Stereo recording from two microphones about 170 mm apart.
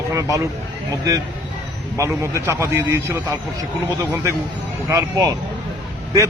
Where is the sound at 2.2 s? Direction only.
15° right (ahead or behind).